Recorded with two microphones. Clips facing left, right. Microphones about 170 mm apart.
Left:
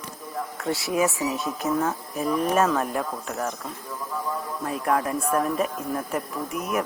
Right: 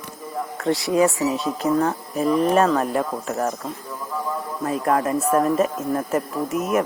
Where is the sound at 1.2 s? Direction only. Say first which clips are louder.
Right 5 dB; 20° right (ahead or behind).